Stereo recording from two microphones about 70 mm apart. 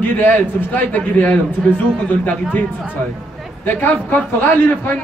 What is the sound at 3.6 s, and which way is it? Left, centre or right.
A man's voice, left.